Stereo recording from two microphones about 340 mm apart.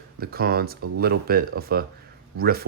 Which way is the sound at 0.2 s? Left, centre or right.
Right.